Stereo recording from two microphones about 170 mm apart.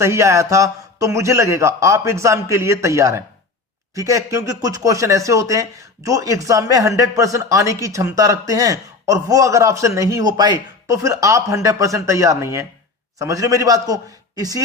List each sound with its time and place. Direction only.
0.0 s a man's voice: 15° right (ahead or behind)